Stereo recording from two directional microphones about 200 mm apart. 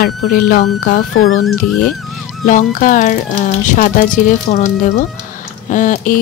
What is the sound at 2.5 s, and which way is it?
Speech, 40° left (ahead or behind).